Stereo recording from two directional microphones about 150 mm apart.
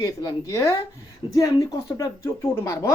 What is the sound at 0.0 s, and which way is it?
Speech, 25° left (ahead or behind).